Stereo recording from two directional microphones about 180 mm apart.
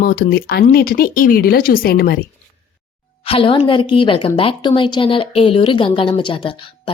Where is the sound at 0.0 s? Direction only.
55° left (ahead or behind).